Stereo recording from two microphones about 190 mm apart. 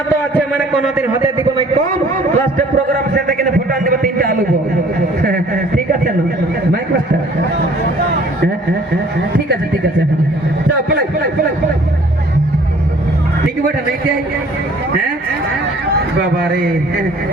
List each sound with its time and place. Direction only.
0.3 s a man's voice: centre (ahead or behind)
2.3 s a man's voice: 50° right (ahead or behind)
16.4 s a man's voice: 50° right (ahead or behind)